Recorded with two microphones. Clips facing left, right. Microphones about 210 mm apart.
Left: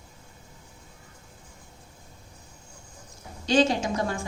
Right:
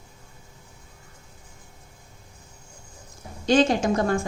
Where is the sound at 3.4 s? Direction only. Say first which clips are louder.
Right 3 dB; 50° right (ahead or behind).